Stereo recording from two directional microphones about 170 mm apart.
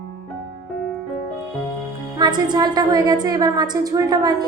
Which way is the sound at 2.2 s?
25° right (ahead or behind).